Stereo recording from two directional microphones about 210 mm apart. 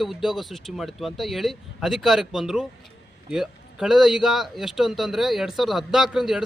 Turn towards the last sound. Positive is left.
turn(degrees=-5)  # may be behind; listen again after turning